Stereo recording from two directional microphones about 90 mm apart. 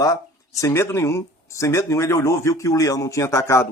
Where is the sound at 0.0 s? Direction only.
40° left (ahead or behind).